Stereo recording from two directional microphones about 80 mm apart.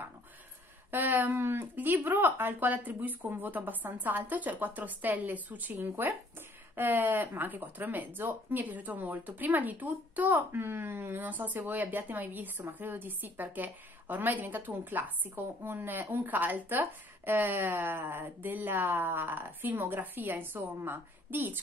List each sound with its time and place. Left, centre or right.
0.9 s a woman's voice: right